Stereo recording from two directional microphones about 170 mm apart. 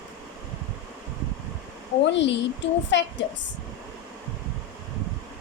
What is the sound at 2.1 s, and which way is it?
A woman's voice, 90° left.